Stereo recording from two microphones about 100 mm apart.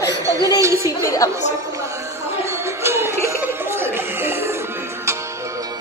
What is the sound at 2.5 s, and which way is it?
Music, 25° right (ahead or behind).